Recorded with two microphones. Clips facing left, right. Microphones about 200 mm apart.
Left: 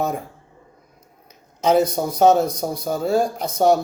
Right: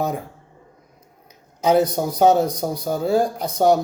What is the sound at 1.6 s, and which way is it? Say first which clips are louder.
Speech: even; 15° right (ahead or behind).